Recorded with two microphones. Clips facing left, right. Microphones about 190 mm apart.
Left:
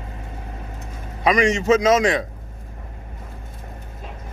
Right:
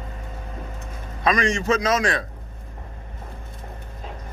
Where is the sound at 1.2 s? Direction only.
20° left (ahead or behind).